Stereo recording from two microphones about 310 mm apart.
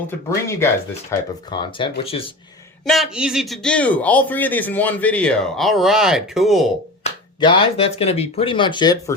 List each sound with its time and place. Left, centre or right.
0.3 s speech: centre
2.8 s a man's voice: centre
7.0 s speech: centre